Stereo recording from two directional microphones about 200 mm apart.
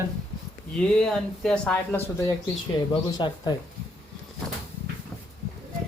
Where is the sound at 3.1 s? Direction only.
20° left (ahead or behind).